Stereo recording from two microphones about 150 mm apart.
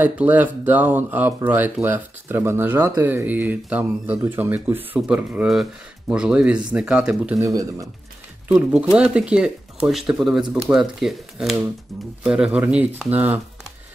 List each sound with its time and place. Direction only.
0.0 s speech: 10° right (ahead or behind)
7.3 s speech: 20° right (ahead or behind)
8.9 s speech: 5° right (ahead or behind)